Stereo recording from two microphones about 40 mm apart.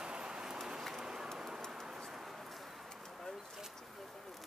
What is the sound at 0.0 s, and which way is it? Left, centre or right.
Rain, right.